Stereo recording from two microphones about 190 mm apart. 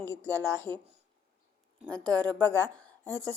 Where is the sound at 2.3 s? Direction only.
10° left (ahead or behind).